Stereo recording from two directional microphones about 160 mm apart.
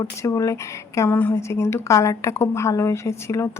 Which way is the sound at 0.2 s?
20° left (ahead or behind).